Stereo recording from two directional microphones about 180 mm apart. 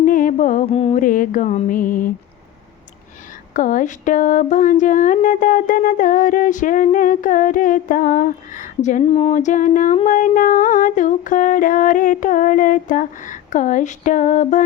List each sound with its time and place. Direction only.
0.0 s music: 50° left (ahead or behind)
1.0 s speech: 50° left (ahead or behind)
3.5 s speech: 45° left (ahead or behind)